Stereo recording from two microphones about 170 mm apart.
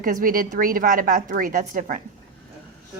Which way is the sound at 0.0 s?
55° right (ahead or behind).